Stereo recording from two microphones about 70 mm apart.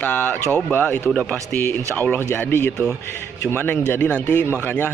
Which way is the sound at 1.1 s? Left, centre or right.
Centre.